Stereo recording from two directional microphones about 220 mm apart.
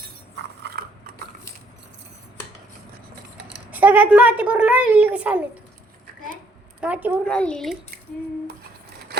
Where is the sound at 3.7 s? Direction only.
10° right (ahead or behind).